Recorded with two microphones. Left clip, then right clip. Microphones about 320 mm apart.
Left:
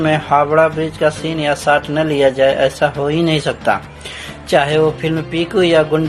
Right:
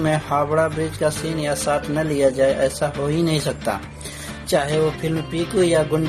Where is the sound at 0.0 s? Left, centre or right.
Right.